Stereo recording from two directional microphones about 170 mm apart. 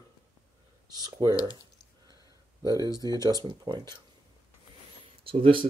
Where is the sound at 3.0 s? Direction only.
25° right (ahead or behind).